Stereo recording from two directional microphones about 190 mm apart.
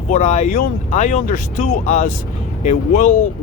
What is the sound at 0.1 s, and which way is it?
Speech, 40° left (ahead or behind).